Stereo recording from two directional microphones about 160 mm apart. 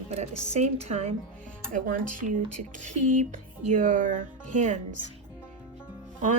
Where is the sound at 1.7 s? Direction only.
55° right (ahead or behind).